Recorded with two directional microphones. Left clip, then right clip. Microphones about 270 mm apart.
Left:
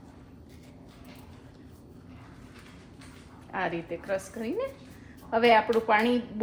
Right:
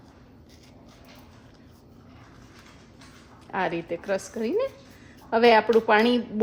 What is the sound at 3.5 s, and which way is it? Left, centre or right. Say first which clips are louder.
A woman's voice: right 4 dB; right.